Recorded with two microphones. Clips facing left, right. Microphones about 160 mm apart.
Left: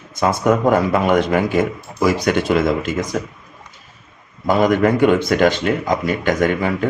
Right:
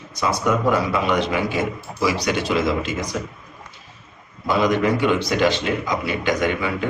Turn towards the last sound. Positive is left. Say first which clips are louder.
# left 4 dB
turn(degrees=45)  # may be behind; listen again after turning